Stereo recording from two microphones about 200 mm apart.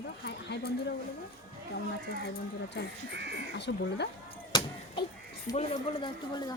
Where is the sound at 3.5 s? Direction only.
60° left (ahead or behind).